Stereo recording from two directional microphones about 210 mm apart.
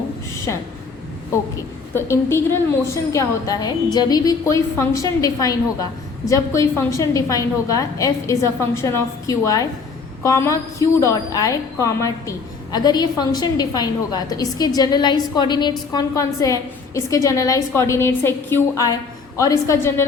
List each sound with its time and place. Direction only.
1.9 s a woman's voice: 10° left (ahead or behind)